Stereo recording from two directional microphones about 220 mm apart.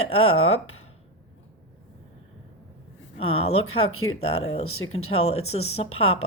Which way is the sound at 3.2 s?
25° left (ahead or behind).